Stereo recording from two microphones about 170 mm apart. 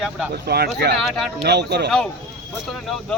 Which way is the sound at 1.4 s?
75° right (ahead or behind).